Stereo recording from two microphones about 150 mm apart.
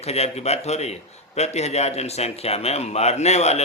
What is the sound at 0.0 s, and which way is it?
Speech, 45° left (ahead or behind).